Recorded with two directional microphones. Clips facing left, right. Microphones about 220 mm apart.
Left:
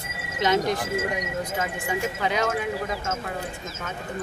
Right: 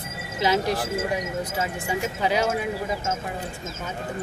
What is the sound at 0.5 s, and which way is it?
Speech, 35° right (ahead or behind).